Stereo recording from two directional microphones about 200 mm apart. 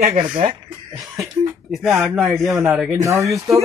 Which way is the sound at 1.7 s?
Centre (ahead or behind).